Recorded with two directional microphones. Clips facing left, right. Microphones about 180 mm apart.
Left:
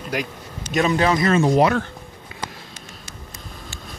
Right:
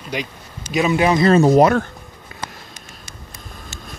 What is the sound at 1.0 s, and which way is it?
Speech, 25° right (ahead or behind).